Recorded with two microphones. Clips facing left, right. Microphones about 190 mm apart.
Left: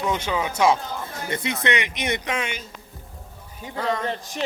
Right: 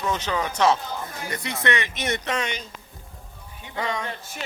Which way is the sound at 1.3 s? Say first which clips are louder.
Left 2 dB; 20° left (ahead or behind).